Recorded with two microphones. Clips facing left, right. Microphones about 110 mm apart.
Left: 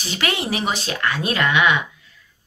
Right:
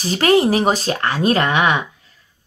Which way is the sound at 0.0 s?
40° right (ahead or behind).